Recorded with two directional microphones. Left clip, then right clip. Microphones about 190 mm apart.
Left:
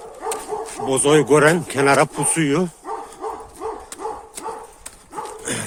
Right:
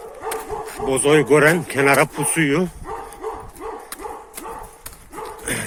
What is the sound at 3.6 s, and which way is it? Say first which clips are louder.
Bow-wow: left 4 dB; 50° left (ahead or behind).